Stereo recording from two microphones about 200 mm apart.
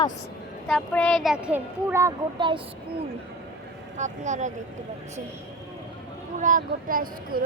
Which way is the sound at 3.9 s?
35° right (ahead or behind).